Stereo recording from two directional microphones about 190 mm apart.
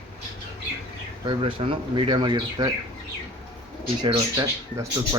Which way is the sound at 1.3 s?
25° right (ahead or behind).